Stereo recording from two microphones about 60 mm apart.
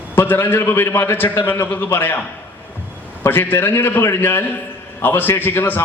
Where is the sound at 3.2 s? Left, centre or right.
Left.